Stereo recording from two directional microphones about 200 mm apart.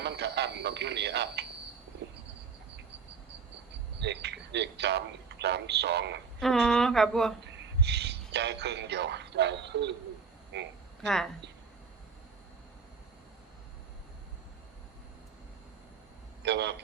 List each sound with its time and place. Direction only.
0.0 s speech: 60° right (ahead or behind)
4.0 s speech: 60° right (ahead or behind)
6.4 s speech: centre (ahead or behind)
7.4 s speech: 60° right (ahead or behind)
11.0 s a woman's voice: centre (ahead or behind)
16.4 s speech: 60° right (ahead or behind)